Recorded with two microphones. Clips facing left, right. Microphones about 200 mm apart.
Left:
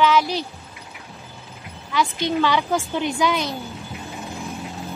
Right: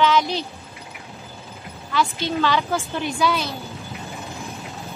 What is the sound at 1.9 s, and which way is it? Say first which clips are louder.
Speech: left 1 dB; 15° left (ahead or behind).